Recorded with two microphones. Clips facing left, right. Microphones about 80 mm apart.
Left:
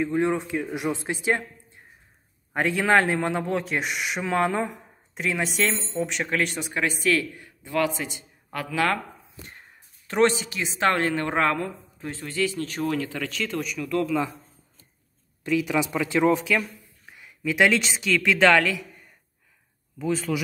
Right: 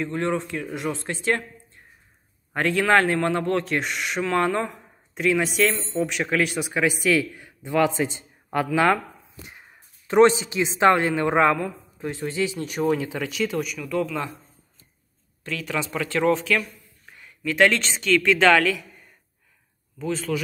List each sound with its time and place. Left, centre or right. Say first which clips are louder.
0.0 s speech: left 2 dB; centre
2.5 s speech: right 1 dB; centre
15.4 s speech: left 5 dB; centre
17.1 s a sound: right 1 dB; centre
17.4 s speech: right 1 dB; centre